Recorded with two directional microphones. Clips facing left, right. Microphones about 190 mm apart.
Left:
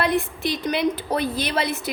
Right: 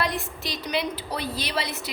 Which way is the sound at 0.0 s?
55° left (ahead or behind).